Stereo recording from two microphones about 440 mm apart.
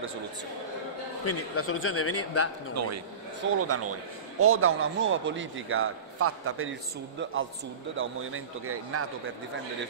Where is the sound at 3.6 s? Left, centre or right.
Right.